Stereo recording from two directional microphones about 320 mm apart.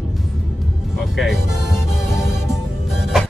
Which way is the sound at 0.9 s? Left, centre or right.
Centre.